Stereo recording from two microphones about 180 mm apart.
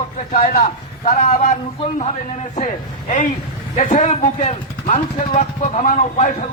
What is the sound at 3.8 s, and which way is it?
Speech, 40° left (ahead or behind).